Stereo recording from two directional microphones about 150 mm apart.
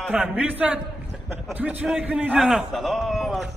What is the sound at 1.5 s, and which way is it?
A man's voice, 10° right (ahead or behind).